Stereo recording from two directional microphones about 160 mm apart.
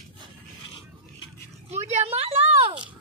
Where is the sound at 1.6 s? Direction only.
45° right (ahead or behind).